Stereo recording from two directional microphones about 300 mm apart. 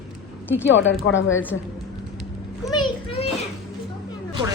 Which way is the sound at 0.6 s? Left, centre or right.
Left.